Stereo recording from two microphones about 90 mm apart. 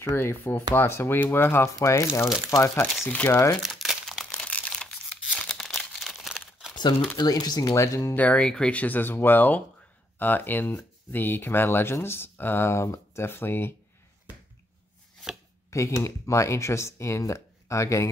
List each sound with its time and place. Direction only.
0.0 s speech: 25° left (ahead or behind)
3.1 s speech: 20° left (ahead or behind)
3.6 s crumpling: centre (ahead or behind)
4.2 s a sound: 5° left (ahead or behind)
5.3 s crumpling: 10° left (ahead or behind)
6.7 s crumpling: 55° left (ahead or behind)
7.2 s speech: 45° left (ahead or behind)
8.2 s speech: 15° left (ahead or behind)
15.7 s speech: 35° left (ahead or behind)